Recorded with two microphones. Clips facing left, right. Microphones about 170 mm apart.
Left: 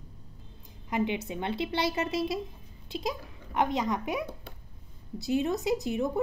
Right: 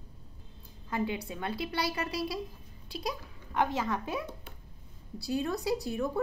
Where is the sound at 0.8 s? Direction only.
20° left (ahead or behind).